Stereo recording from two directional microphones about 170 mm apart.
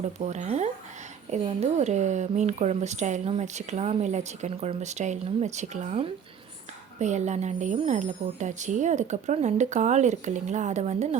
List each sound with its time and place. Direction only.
0.2 s speech: 40° right (ahead or behind)